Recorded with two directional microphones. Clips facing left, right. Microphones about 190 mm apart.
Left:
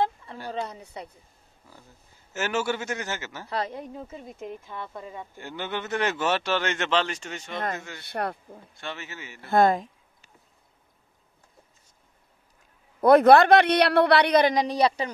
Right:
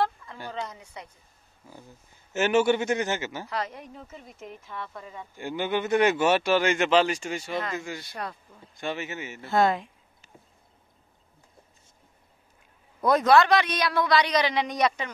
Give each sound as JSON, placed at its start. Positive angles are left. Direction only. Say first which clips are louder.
{"t": 0.0, "sound": "a sound", "louder": "left 1 dB", "side_deg": 25}
{"t": 0.5, "sound": "speech", "louder": "left 3 dB", "side_deg": 35}
{"t": 2.3, "sound": "speech", "louder": "right 6 dB", "side_deg": -20}
{"t": 3.4, "sound": "speech", "louder": "left 2 dB", "side_deg": 30}
{"t": 5.4, "sound": "speech", "louder": "right 6 dB", "side_deg": -15}
{"t": 8.0, "sound": "speech", "louder": "left 6 dB", "side_deg": 60}
{"t": 8.7, "sound": "speech", "louder": "right 6 dB", "side_deg": -15}
{"t": 9.5, "sound": "speech", "louder": "left 3 dB", "side_deg": 50}
{"t": 13.0, "sound": "speech", "louder": "left 5 dB", "side_deg": 60}
{"t": 14.5, "sound": "speech", "louder": "left 3 dB", "side_deg": 35}